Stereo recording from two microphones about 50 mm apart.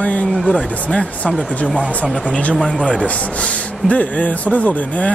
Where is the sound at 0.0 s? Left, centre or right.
Left.